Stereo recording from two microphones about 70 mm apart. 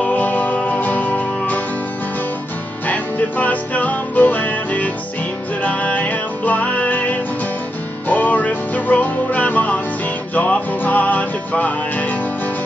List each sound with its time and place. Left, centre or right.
0.0 s music: left
2.9 s music: left